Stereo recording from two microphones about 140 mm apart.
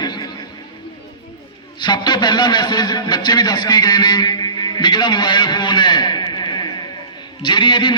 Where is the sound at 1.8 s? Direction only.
30° left (ahead or behind).